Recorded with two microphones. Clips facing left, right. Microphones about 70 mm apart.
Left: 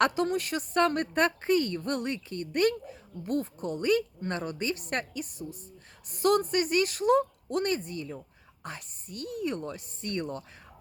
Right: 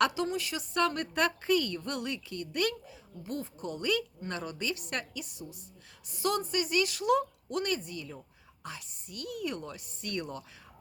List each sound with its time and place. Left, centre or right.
0.0 s a woman's voice: left